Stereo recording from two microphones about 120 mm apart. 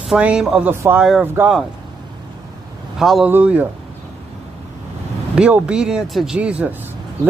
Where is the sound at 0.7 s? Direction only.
20° right (ahead or behind).